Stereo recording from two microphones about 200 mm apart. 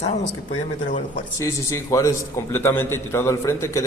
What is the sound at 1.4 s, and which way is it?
A man's voice, 15° left (ahead or behind).